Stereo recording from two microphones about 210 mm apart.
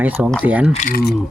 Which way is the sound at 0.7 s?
40° left (ahead or behind).